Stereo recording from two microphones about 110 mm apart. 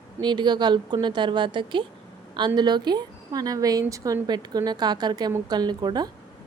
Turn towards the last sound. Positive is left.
turn(degrees=-40)  # may be behind; listen again after turning